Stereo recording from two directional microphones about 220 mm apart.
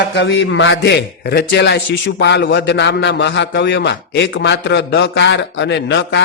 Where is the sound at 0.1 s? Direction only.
55° left (ahead or behind).